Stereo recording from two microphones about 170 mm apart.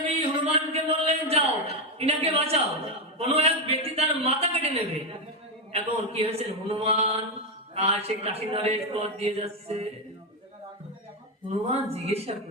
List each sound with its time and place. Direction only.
0.1 s a sound: 35° right (ahead or behind)
3.2 s a man's voice: 35° right (ahead or behind)
11.4 s speech: 35° right (ahead or behind)